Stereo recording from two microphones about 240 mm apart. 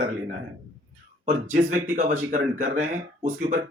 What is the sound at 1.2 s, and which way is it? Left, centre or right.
Speech, right.